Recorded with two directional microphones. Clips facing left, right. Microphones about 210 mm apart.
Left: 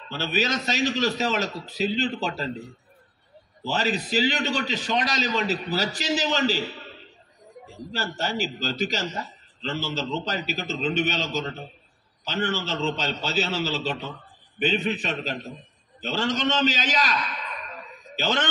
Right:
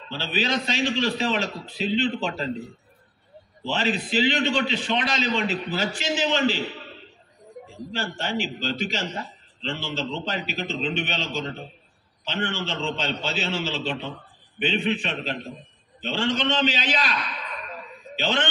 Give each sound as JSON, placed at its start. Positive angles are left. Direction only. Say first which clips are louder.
{"t": 0.1, "sound": "a man's voice", "louder": "even", "side_deg": 45}
{"t": 3.6, "sound": "a man's voice", "louder": "even", "side_deg": 40}
{"t": 7.9, "sound": "a man's voice", "louder": "even", "side_deg": 40}